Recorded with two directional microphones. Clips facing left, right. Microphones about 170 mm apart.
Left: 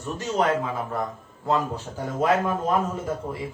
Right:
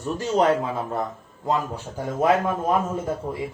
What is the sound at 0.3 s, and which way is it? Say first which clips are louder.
Speech: right 3 dB; 30° right (ahead or behind).